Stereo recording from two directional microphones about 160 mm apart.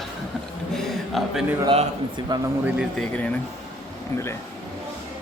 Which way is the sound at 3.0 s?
10° left (ahead or behind).